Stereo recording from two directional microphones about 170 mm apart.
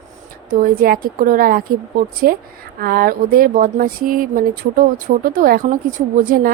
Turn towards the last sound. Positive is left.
turn(degrees=-55)  # may be behind; listen again after turning